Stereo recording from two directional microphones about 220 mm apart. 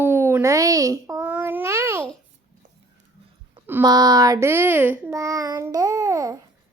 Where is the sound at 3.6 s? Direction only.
15° right (ahead or behind).